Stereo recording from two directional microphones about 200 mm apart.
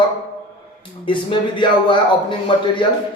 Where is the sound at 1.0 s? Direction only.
25° left (ahead or behind).